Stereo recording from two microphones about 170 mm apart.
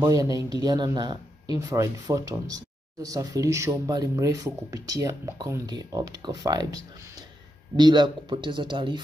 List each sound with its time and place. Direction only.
0.0 s speech: 20° right (ahead or behind)